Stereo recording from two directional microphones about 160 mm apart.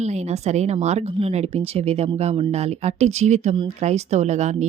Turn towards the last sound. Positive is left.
turn(degrees=-45)  # may be behind; listen again after turning